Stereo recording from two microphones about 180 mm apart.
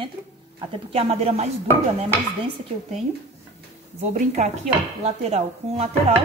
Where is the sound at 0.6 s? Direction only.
35° right (ahead or behind).